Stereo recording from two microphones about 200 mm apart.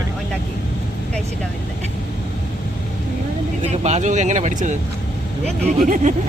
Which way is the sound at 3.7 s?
35° right (ahead or behind).